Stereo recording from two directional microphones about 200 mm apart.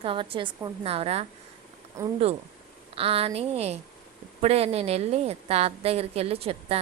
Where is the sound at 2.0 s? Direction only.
15° right (ahead or behind).